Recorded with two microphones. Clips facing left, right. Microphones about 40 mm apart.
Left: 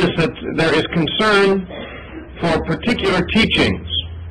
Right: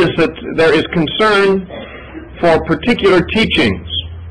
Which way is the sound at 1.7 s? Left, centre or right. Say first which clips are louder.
Right 2 dB; centre.